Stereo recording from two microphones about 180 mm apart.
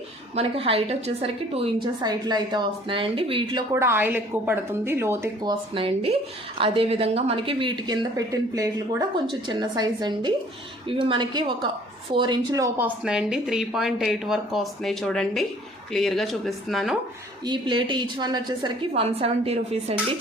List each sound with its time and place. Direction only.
0.3 s speech: 30° right (ahead or behind)
3.7 s a woman's voice: 15° right (ahead or behind)
17.4 s speech: 25° right (ahead or behind)